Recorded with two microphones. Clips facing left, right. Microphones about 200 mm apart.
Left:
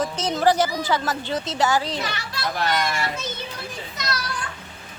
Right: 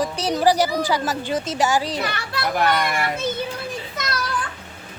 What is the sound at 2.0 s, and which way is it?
A child's voice, 60° right (ahead or behind).